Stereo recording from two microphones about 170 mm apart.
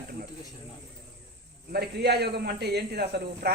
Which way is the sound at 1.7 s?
70° right (ahead or behind).